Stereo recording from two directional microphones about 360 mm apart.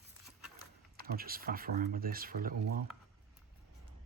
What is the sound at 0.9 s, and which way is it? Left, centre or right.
Speech, right.